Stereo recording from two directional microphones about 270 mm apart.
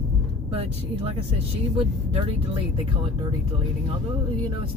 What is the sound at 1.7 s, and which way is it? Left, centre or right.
Speech, right.